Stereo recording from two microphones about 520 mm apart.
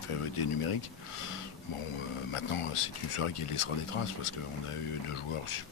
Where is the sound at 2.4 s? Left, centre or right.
Left.